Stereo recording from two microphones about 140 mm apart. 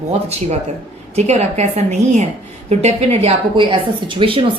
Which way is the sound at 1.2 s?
55° right (ahead or behind).